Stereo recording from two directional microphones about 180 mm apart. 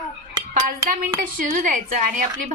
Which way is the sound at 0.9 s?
50° right (ahead or behind).